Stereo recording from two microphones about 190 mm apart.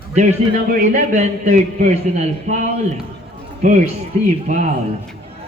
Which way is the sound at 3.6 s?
35° right (ahead or behind).